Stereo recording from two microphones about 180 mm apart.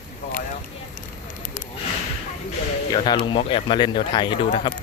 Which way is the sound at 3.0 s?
25° left (ahead or behind).